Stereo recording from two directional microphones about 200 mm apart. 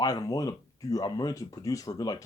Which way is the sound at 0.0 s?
20° left (ahead or behind).